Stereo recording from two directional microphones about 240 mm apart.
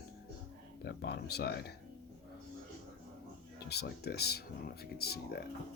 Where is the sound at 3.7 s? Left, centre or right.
Left.